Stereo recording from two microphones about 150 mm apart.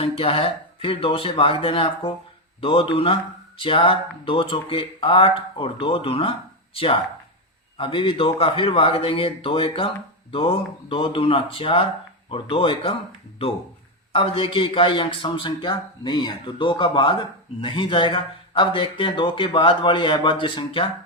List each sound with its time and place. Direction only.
0.0 s a man's voice: 40° left (ahead or behind)
14.1 s a man's voice: 35° left (ahead or behind)